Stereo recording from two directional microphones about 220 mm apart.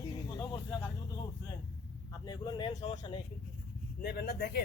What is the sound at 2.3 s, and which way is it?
Speech, 20° left (ahead or behind).